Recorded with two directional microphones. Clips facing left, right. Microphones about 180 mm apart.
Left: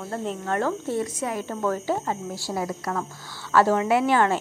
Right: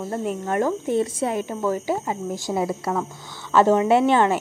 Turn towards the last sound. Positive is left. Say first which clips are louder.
# right 3 dB
turn(degrees=-20)  # may be behind; listen again after turning